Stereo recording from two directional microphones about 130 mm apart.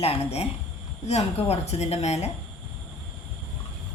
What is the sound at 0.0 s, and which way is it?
A woman's voice, 50° left (ahead or behind).